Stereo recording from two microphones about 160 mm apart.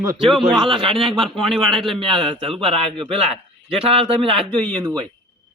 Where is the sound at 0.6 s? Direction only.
35° right (ahead or behind).